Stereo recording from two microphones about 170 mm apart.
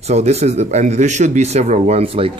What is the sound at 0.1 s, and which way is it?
Speech, 40° right (ahead or behind).